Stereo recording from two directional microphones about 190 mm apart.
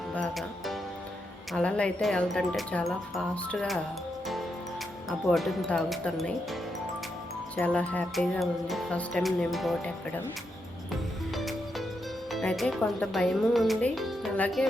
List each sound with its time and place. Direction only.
0.1 s music: centre (ahead or behind)
1.5 s speech: 5° left (ahead or behind)
5.0 s speech: centre (ahead or behind)
12.3 s speech: centre (ahead or behind)